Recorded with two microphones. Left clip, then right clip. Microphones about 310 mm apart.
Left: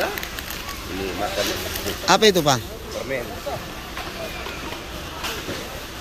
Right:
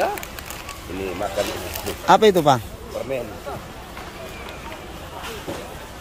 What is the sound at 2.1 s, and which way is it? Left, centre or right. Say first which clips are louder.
Speech: right 2 dB; centre.